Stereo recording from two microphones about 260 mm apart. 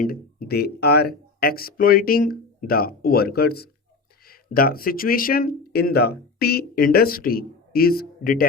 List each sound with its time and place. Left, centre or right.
0.0 s speech: left